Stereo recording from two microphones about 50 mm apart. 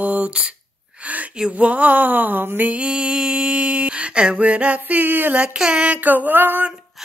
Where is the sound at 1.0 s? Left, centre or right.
Right.